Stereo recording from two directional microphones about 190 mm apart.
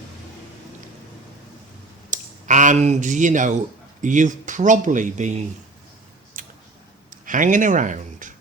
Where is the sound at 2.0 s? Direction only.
40° right (ahead or behind).